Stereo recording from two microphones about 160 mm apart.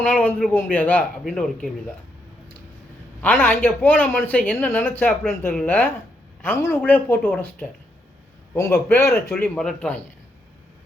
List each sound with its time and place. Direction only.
0.5 s speech: 10° left (ahead or behind)
3.2 s speech: 10° left (ahead or behind)